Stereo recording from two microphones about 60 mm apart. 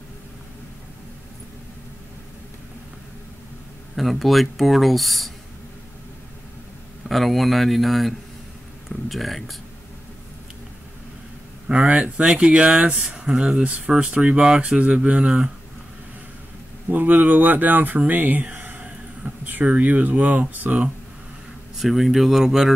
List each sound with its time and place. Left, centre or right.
3.9 s speech: centre
7.1 s speech: centre
11.7 s speech: centre
14.8 s speech: right
16.9 s speech: right
21.7 s speech: centre